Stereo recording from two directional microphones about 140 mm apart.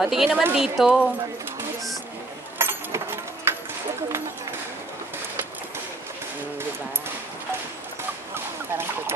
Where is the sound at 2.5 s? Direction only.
15° right (ahead or behind).